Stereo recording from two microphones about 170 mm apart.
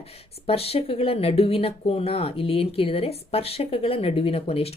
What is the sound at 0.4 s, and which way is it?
Speech, 35° left (ahead or behind).